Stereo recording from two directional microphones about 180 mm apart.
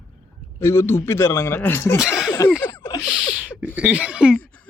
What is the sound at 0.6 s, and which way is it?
Speech, 15° left (ahead or behind).